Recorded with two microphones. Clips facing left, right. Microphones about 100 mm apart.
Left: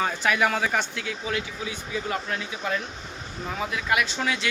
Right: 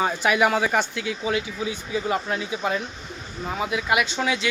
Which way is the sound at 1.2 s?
15° right (ahead or behind).